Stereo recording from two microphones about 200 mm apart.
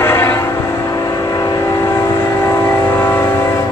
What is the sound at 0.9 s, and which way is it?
Vehicle, 20° left (ahead or behind).